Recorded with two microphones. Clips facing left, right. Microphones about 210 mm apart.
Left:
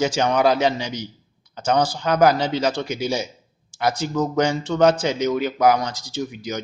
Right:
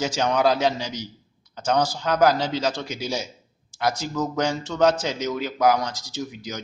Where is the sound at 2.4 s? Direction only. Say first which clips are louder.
Left 3 dB; 60° left (ahead or behind).